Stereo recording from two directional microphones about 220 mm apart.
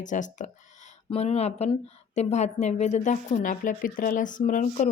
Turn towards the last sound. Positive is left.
turn(degrees=35)  # may be behind; listen again after turning